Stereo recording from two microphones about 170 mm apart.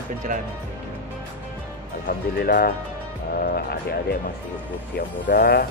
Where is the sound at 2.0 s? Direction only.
60° left (ahead or behind).